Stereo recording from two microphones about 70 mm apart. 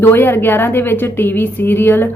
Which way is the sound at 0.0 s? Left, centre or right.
Left.